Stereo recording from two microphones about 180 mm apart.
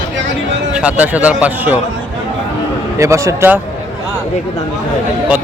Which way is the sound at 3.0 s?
15° right (ahead or behind).